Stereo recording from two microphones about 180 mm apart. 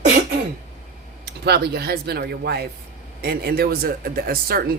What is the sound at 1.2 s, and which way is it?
Speech, 65° right (ahead or behind).